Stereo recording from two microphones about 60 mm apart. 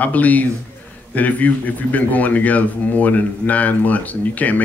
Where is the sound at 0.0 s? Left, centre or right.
Left.